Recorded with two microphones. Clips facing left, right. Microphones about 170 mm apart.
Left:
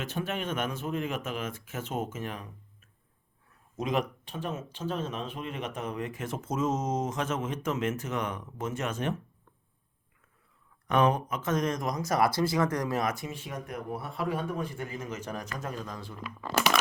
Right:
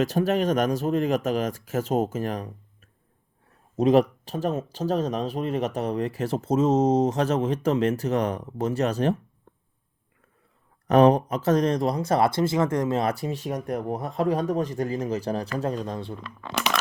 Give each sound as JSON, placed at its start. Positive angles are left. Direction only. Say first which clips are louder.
{"t": 0.0, "sound": "speech", "louder": "right 11 dB", "side_deg": -40}
{"t": 10.8, "sound": "speech", "louder": "right 8 dB", "side_deg": -35}
{"t": 16.2, "sound": "speech", "louder": "left 4 dB", "side_deg": 5}